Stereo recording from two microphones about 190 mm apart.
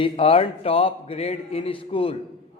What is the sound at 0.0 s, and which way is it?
A man's voice, 30° left (ahead or behind).